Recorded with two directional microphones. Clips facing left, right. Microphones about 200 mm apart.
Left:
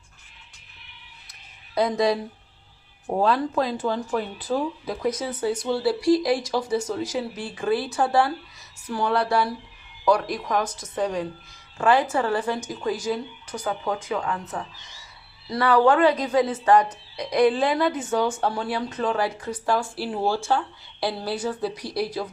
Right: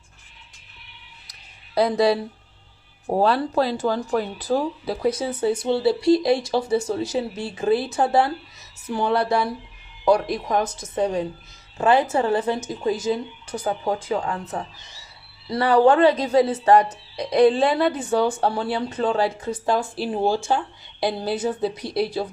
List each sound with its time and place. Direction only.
1.3 s a sound: 35° right (ahead or behind)
3.1 s a woman's voice: 35° right (ahead or behind)
15.6 s a woman's voice: 30° right (ahead or behind)